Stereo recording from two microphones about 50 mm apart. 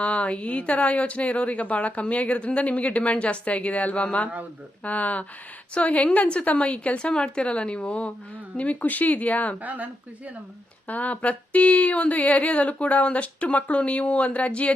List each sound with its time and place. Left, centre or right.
0.0 s speech: left
9.6 s speech: right
10.8 s speech: left